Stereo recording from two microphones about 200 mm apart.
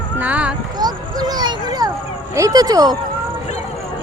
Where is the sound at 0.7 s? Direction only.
20° right (ahead or behind).